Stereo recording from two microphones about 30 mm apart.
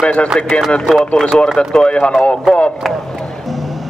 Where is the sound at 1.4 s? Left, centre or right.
Left.